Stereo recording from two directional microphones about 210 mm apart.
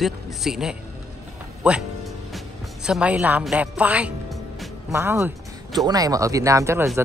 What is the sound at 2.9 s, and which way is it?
A woman's voice, 5° right (ahead or behind).